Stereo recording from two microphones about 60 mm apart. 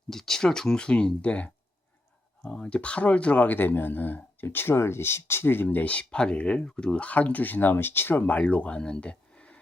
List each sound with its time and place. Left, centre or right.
0.1 s speech: centre; by 5.6 s left
5.6 s speech: left